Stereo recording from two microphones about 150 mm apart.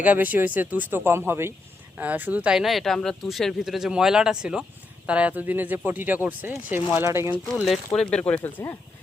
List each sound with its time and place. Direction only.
0.0 s speech: 10° right (ahead or behind)
7.5 s speech: centre (ahead or behind)